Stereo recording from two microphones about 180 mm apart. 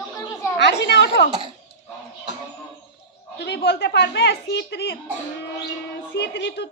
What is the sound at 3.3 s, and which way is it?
A woman's voice, 65° left (ahead or behind).